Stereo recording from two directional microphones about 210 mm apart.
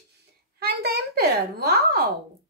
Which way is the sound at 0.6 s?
50° right (ahead or behind).